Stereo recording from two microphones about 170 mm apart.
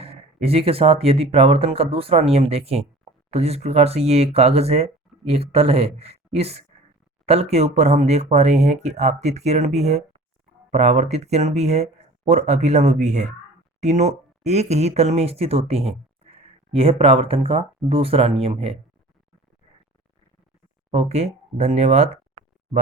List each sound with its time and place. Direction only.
0.0 s speech: 35° right (ahead or behind)
20.9 s speech: 40° right (ahead or behind)